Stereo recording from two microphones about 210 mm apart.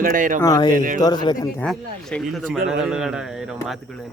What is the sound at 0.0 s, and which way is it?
Speech, 40° right (ahead or behind).